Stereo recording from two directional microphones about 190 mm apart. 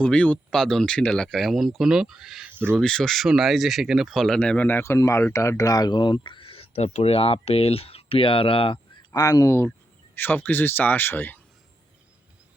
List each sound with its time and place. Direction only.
0.0 s speech: 5° left (ahead or behind)